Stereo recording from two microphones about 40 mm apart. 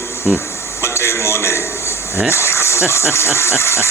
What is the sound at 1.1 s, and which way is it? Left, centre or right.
A man's voice, left.